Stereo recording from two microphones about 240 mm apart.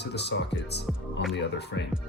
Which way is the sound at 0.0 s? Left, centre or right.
Left.